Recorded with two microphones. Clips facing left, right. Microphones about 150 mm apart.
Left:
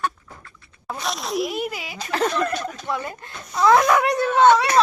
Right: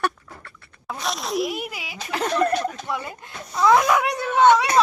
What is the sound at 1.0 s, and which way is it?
Speech, centre (ahead or behind).